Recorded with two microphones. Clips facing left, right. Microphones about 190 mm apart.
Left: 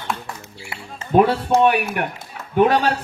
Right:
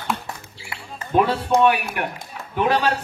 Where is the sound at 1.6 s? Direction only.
50° left (ahead or behind).